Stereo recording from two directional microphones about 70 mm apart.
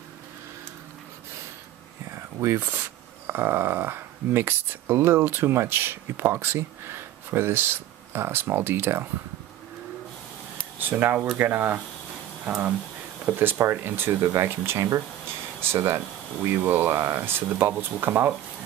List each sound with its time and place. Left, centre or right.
2.4 s speech: right
10.8 s speech: right
13.2 s speech: right
14.2 s speech: right
16.5 s speech: right